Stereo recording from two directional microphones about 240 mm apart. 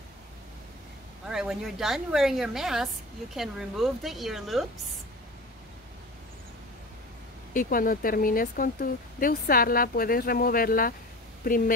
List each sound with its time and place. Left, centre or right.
1.2 s a woman's voice: centre
7.5 s speech: left